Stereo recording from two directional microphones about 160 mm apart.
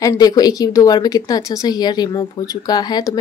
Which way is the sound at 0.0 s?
25° left (ahead or behind).